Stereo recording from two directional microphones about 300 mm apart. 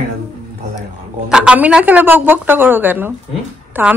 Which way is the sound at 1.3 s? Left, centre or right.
Centre.